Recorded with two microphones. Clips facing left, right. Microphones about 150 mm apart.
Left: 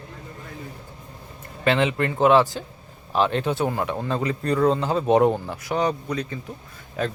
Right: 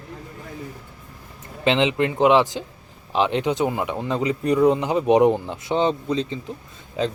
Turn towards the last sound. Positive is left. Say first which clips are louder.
# right 2 dB
turn(degrees=-20)  # may be behind; listen again after turning